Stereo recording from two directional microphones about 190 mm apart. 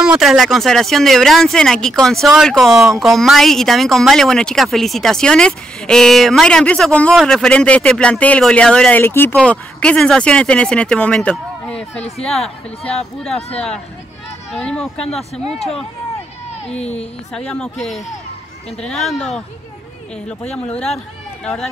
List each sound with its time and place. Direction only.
0.0 s speech: 5° right (ahead or behind)
14.5 s speech: 5° left (ahead or behind)
17.5 s speech: 5° left (ahead or behind)